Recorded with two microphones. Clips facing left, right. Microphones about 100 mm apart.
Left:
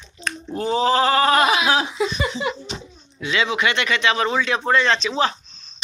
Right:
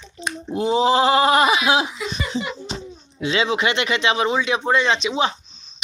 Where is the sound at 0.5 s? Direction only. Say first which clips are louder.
Right 2 dB; 20° right (ahead or behind).